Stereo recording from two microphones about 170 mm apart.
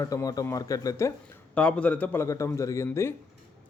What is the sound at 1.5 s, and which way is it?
A man's voice, 5° left (ahead or behind).